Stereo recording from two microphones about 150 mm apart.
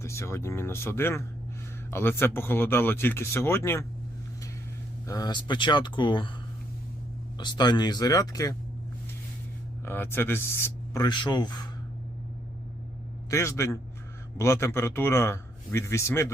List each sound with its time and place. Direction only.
0.0 s speech: 15° left (ahead or behind)
5.0 s speech: 25° left (ahead or behind)
7.3 s speech: 30° left (ahead or behind)
9.8 s speech: 15° left (ahead or behind)
11.0 s speech: 30° left (ahead or behind)
13.3 s speech: 20° left (ahead or behind)